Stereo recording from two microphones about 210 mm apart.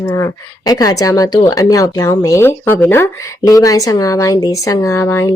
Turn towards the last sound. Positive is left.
turn(degrees=15)  # may be behind; listen again after turning